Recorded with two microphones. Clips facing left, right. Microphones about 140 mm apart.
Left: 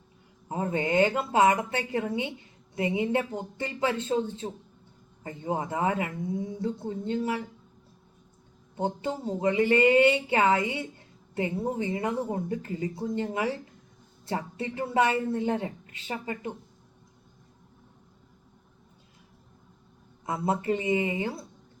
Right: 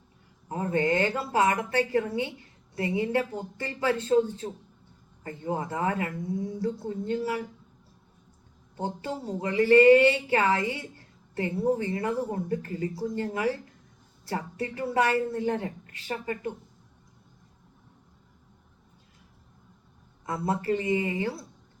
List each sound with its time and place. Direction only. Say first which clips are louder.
0.4 s speech: right 2 dB; 20° left (ahead or behind)
8.7 s speech: left 3 dB; 20° left (ahead or behind)
20.2 s speech: left 1 dB; 20° left (ahead or behind)